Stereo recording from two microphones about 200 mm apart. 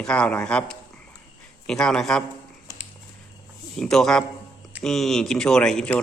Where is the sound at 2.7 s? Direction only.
20° left (ahead or behind).